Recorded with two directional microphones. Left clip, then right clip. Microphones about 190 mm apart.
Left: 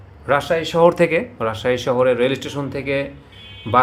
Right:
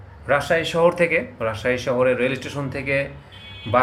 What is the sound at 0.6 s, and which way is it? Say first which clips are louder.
Speech: left 3 dB; 20° left (ahead or behind).